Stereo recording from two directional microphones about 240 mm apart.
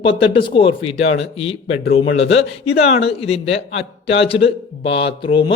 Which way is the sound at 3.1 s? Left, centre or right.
Left.